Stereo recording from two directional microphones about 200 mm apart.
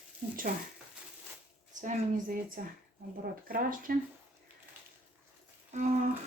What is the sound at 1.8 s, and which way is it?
Speech, 45° right (ahead or behind).